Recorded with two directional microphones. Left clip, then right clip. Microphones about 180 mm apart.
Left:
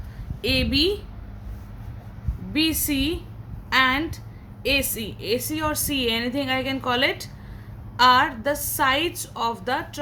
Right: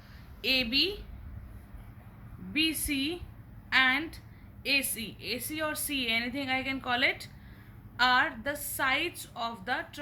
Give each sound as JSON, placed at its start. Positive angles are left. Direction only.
{"t": 0.4, "sound": "a woman's voice", "side_deg": 25}
{"t": 2.5, "sound": "a woman's voice", "side_deg": 25}